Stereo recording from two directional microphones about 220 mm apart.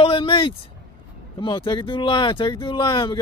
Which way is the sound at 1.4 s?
20° left (ahead or behind).